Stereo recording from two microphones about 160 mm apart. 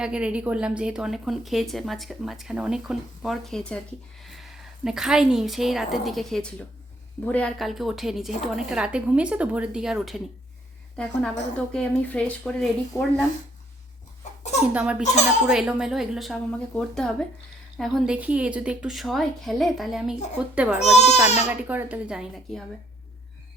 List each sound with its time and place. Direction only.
0.0 s a woman's voice: 5° right (ahead or behind)
14.7 s speech: 5° right (ahead or behind)
15.0 s speech: 45° left (ahead or behind)
15.4 s a woman's voice: 5° right (ahead or behind)
20.7 s speech: 45° left (ahead or behind)
21.5 s speech: 10° right (ahead or behind)